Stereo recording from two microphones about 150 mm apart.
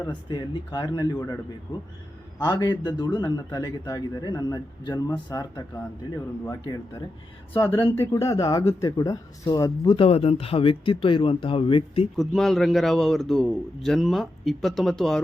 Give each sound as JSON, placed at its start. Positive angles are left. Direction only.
{"t": 0.1, "sound": "a man's voice", "side_deg": 30}
{"t": 2.4, "sound": "a man's voice", "side_deg": 25}
{"t": 7.9, "sound": "speech", "side_deg": 20}
{"t": 12.1, "sound": "a man's voice", "side_deg": 0}